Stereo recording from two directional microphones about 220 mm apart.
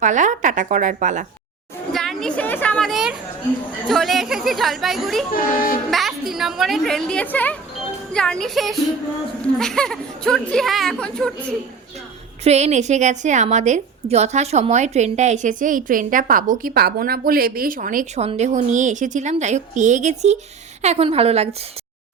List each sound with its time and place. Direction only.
0.0 s a woman's voice: 35° right (ahead or behind)
1.9 s a woman's voice: centre (ahead or behind)
5.3 s speech: 40° left (ahead or behind)
5.9 s a woman's voice: centre (ahead or behind)
12.5 s a woman's voice: 30° right (ahead or behind)